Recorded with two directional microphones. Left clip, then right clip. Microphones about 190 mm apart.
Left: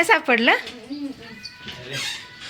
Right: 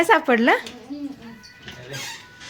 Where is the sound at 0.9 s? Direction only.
15° left (ahead or behind).